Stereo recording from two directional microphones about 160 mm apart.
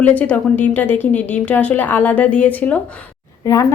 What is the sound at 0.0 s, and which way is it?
Speech, 10° left (ahead or behind).